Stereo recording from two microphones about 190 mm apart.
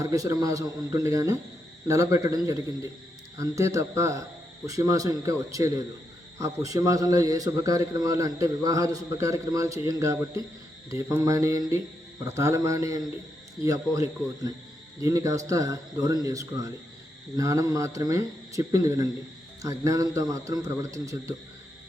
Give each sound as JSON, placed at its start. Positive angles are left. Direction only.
{"t": 0.0, "sound": "a man's voice", "side_deg": -15}